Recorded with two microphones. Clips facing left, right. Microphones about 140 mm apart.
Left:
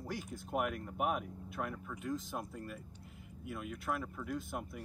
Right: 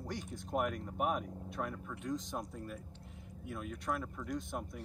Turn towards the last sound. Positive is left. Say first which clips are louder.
# right 1 dB
turn(degrees=5)  # may be behind; listen again after turning